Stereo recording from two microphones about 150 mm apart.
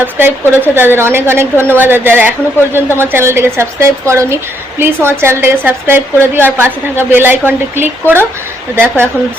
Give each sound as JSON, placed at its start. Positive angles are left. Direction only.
{"t": 0.0, "sound": "a woman's voice", "side_deg": -15}